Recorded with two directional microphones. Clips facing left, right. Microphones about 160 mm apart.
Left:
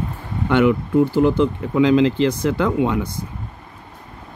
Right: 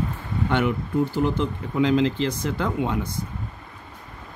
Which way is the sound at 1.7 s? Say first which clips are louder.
Left 5 dB; 90° left.